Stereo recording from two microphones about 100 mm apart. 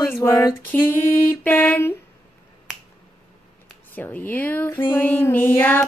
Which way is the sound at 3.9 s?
20° left (ahead or behind).